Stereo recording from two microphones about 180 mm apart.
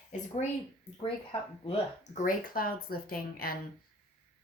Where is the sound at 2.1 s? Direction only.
50° left (ahead or behind).